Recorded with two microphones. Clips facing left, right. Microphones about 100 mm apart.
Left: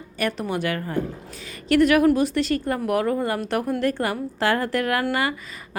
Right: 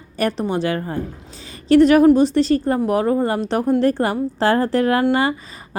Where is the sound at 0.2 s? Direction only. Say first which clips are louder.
Right 5 dB; 30° right (ahead or behind).